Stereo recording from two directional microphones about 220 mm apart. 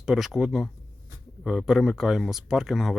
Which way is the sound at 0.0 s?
Centre (ahead or behind).